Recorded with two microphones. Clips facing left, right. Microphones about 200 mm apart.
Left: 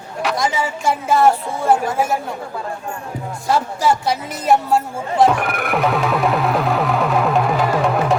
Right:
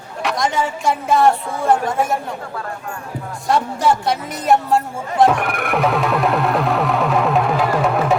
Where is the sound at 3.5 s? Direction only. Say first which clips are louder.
Right 1 dB; centre (ahead or behind).